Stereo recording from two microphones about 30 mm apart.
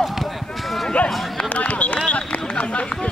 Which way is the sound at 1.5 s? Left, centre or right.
Left.